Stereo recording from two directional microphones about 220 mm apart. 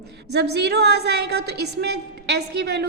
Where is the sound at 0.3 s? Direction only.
50° right (ahead or behind).